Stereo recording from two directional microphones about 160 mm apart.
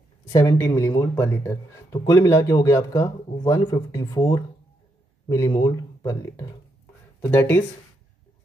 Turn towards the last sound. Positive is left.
turn(degrees=15)  # may be behind; listen again after turning